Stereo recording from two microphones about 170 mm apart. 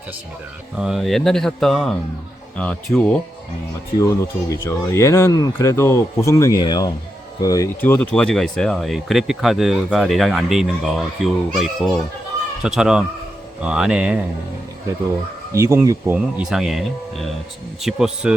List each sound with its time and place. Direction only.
0.8 s speech: centre (ahead or behind)
4.5 s speech: 15° left (ahead or behind); by 14.2 s 5° right (ahead or behind)
15.5 s speech: 15° right (ahead or behind)